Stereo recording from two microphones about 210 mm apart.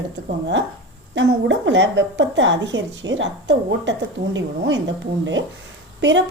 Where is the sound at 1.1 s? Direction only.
60° right (ahead or behind).